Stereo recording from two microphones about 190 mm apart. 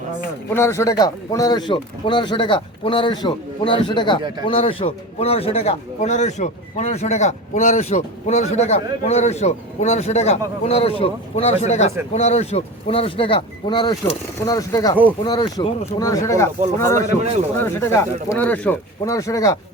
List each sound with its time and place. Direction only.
0.5 s a man's voice: 15° left (ahead or behind)